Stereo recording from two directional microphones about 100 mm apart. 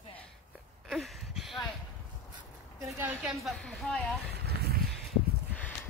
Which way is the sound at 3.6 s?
10° left (ahead or behind).